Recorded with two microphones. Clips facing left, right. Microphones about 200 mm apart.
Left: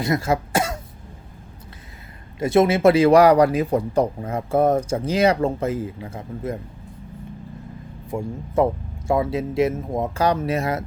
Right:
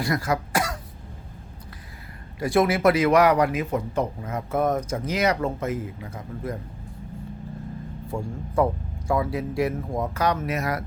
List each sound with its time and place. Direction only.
0.0 s speech: 25° left (ahead or behind)
2.4 s speech: 25° left (ahead or behind)
8.0 s speech: 20° left (ahead or behind)